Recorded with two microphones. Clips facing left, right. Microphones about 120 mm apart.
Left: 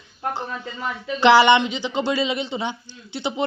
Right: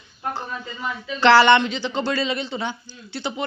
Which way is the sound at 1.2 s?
15° left (ahead or behind).